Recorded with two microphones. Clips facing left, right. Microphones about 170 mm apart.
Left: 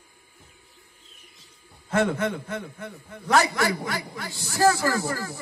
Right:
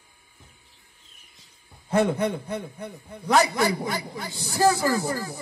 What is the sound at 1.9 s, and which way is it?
Speech, 15° right (ahead or behind).